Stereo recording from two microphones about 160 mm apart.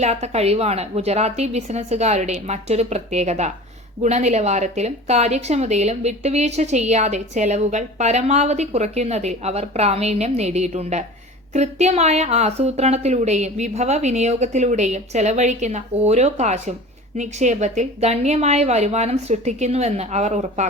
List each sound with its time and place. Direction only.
0.0 s speech: 45° right (ahead or behind)